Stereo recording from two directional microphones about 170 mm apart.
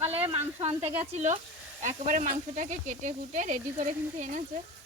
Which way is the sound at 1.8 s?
50° right (ahead or behind).